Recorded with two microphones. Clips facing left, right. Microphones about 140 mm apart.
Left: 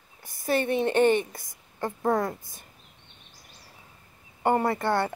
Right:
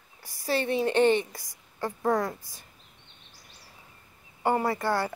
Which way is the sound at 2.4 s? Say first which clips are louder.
Left 2 dB; 50° left (ahead or behind).